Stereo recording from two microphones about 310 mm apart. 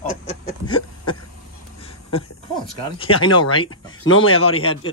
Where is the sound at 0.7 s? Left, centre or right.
Centre.